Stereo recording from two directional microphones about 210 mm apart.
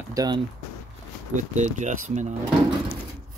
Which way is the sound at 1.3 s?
35° right (ahead or behind).